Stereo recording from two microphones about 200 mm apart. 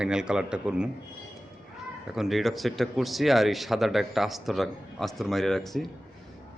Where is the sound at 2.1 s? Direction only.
Centre (ahead or behind).